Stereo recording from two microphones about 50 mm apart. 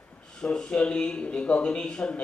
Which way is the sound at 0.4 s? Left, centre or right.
Centre.